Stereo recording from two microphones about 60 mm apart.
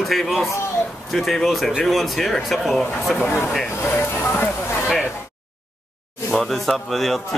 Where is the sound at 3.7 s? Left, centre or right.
Left.